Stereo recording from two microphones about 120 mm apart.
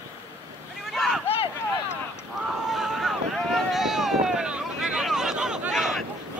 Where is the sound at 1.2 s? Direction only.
50° left (ahead or behind).